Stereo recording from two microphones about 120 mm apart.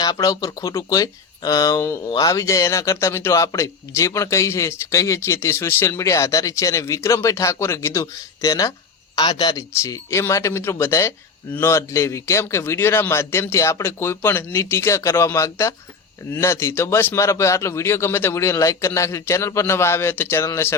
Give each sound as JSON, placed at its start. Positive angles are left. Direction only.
{"t": 0.0, "sound": "a man's voice", "side_deg": 35}
{"t": 9.7, "sound": "a man's voice", "side_deg": 25}